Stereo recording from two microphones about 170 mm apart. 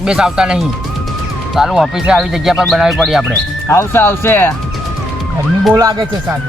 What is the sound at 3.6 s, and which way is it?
Speech, 15° left (ahead or behind).